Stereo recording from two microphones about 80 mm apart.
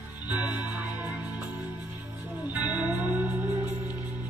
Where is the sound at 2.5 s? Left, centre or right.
Centre.